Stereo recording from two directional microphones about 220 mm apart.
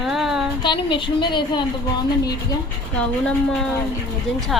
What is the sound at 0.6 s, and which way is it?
A woman's voice, 20° left (ahead or behind).